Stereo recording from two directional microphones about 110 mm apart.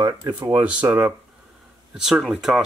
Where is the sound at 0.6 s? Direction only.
15° right (ahead or behind).